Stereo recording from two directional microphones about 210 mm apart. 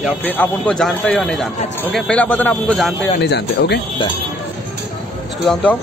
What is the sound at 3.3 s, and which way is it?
Speech, 55° left (ahead or behind).